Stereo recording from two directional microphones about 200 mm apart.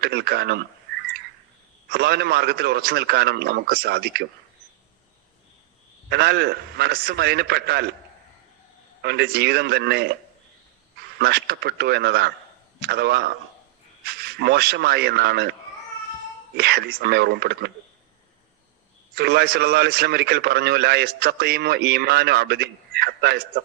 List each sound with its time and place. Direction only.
0.0 s a man's voice: 55° right (ahead or behind)
1.9 s a man's voice: 55° right (ahead or behind)
6.1 s a man's voice: 55° right (ahead or behind)
9.0 s a man's voice: 55° right (ahead or behind)
11.2 s a man's voice: 55° right (ahead or behind)
16.6 s a man's voice: 55° right (ahead or behind)
19.1 s a man's voice: 55° right (ahead or behind)